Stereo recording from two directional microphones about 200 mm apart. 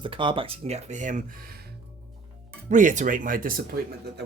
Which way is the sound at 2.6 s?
40° right (ahead or behind).